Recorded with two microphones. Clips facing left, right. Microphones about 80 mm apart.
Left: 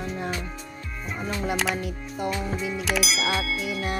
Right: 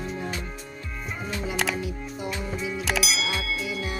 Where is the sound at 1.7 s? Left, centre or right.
Left.